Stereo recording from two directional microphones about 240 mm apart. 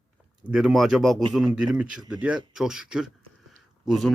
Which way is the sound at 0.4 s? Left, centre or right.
Centre.